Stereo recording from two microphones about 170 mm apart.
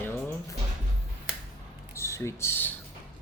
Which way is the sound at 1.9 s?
15° left (ahead or behind).